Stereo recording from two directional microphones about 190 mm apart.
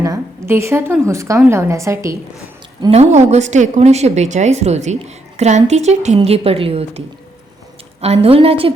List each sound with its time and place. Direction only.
0.0 s a woman's voice: 15° right (ahead or behind)
2.9 s a woman's voice: 35° right (ahead or behind)
8.0 s a woman's voice: 30° right (ahead or behind)